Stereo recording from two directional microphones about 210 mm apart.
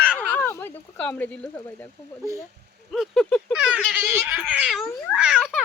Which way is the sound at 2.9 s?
Centre (ahead or behind).